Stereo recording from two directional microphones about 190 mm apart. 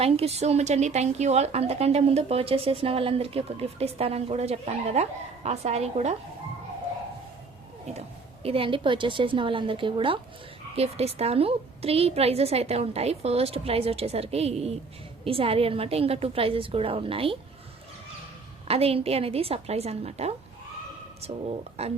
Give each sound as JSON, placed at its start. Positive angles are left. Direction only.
{"t": 0.0, "sound": "speech", "side_deg": -35}
{"t": 8.4, "sound": "a woman's voice", "side_deg": -30}
{"t": 18.7, "sound": "speech", "side_deg": -30}
{"t": 21.8, "sound": "speech", "side_deg": -35}